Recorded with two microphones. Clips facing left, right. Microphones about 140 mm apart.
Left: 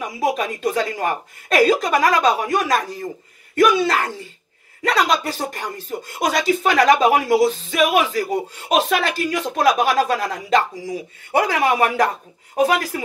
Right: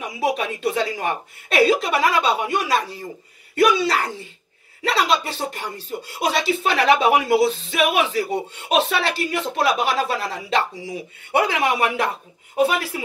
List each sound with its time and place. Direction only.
0.0 s speech: 40° left (ahead or behind)